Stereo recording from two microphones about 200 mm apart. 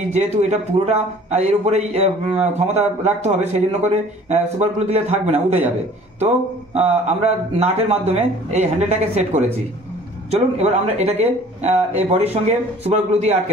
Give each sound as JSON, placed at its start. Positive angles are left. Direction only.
{"t": 0.1, "sound": "a man's voice", "side_deg": -35}